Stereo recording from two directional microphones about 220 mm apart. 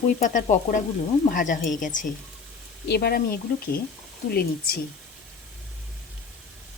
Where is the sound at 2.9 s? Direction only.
45° left (ahead or behind).